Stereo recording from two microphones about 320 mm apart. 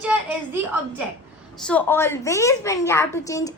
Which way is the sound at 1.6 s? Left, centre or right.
Centre.